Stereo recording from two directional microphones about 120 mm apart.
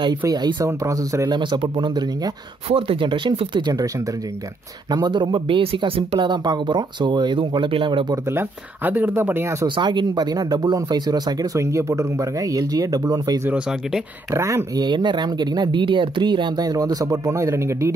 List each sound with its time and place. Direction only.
0.2 s speech: 35° right (ahead or behind)
1.4 s speech: 40° right (ahead or behind)
8.1 s speech: 20° right (ahead or behind)
9.7 s speech: 40° right (ahead or behind)
14.9 s speech: 40° right (ahead or behind)